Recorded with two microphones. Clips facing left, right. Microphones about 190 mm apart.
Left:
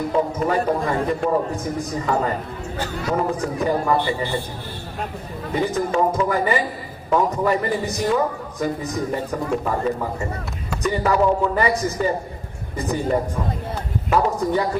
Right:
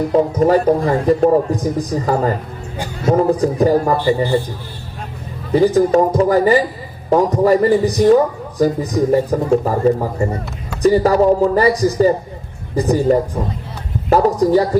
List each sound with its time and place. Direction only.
0.1 s a man's voice: 35° right (ahead or behind)
5.5 s a man's voice: 35° right (ahead or behind)